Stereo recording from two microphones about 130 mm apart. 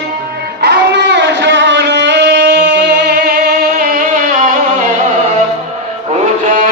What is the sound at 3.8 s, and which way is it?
Music, 90° right.